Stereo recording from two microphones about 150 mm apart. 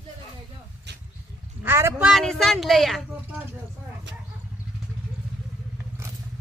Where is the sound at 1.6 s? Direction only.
15° right (ahead or behind).